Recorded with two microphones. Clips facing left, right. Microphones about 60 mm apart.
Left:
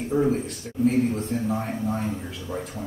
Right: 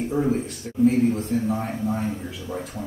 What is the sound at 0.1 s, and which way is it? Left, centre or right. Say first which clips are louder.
A man's voice: left 3 dB; centre.